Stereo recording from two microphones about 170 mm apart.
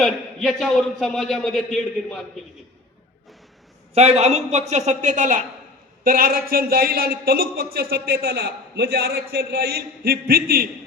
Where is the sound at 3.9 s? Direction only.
40° right (ahead or behind).